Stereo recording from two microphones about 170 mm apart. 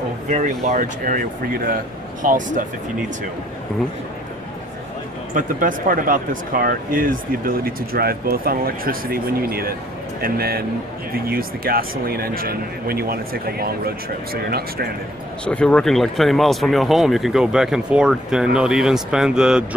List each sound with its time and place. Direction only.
0.3 s speech: 45° right (ahead or behind)
5.3 s speech: 55° right (ahead or behind)
15.4 s speech: 5° left (ahead or behind)